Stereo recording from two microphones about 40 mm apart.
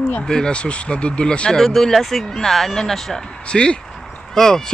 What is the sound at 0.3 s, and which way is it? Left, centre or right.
Speech, left.